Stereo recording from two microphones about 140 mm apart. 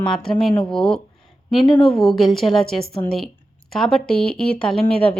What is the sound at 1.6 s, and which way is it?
Speech, 35° left (ahead or behind).